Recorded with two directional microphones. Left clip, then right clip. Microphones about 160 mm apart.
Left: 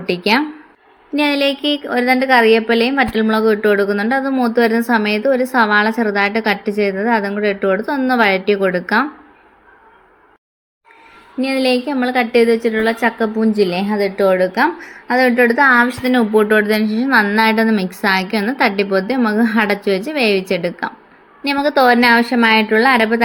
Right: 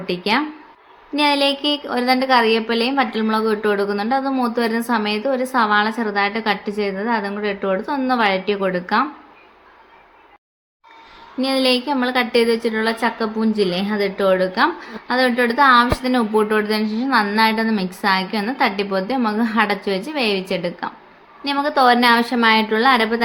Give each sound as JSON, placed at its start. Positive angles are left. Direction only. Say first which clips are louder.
{"t": 1.1, "sound": "a woman's voice", "louder": "left 1 dB", "side_deg": 15}
{"t": 11.3, "sound": "a woman's voice", "louder": "left 2 dB", "side_deg": 10}
{"t": 15.8, "sound": "a woman's voice", "louder": "left 3 dB", "side_deg": 10}